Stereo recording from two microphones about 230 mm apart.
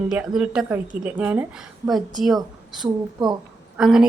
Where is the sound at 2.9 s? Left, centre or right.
Centre.